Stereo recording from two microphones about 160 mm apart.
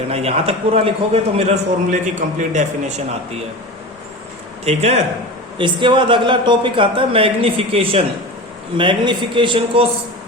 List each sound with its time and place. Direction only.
0.1 s a man's voice: 40° right (ahead or behind)
4.6 s a man's voice: 40° right (ahead or behind)
5.5 s a man's voice: 30° right (ahead or behind)